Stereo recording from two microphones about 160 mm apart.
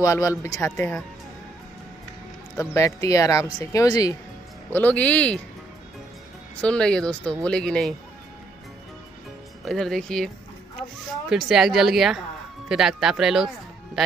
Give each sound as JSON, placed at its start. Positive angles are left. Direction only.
{"t": 0.0, "sound": "speech", "side_deg": 20}
{"t": 2.5, "sound": "speech", "side_deg": 20}
{"t": 4.7, "sound": "speech", "side_deg": 10}
{"t": 6.6, "sound": "speech", "side_deg": 5}
{"t": 9.7, "sound": "speech", "side_deg": 0}